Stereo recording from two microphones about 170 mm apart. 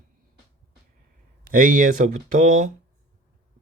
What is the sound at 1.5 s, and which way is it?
Speech, 55° right (ahead or behind).